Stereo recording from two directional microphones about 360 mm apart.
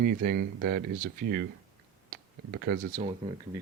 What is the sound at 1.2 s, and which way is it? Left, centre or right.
Speech, right.